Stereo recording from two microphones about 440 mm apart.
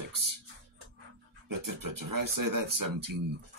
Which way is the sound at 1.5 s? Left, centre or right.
Right.